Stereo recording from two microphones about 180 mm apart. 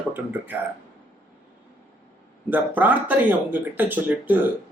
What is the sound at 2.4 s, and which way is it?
Speech, 10° right (ahead or behind).